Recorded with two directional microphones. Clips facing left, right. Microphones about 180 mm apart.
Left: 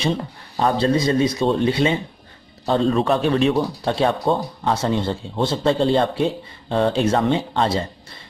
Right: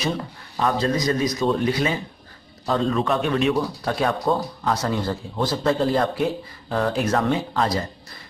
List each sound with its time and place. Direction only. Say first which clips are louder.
0.0 s speech: left 3 dB; 30° left (ahead or behind)